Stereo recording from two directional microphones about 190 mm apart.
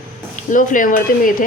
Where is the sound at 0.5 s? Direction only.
45° left (ahead or behind).